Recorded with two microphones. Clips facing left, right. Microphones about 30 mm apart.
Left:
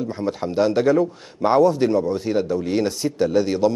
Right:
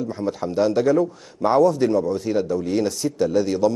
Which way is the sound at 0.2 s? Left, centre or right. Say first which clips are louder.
Left 1 dB; left.